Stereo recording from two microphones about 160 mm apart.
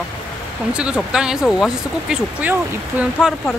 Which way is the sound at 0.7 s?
5° right (ahead or behind).